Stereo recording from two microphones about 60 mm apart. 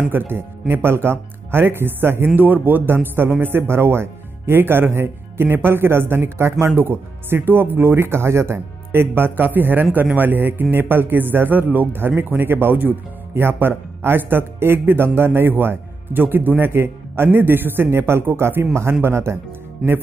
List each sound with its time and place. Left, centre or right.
0.1 s speech: right
19.8 s speech: centre